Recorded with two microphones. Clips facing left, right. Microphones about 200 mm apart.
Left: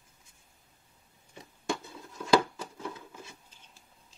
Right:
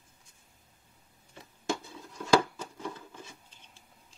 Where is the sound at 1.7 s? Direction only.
Centre (ahead or behind).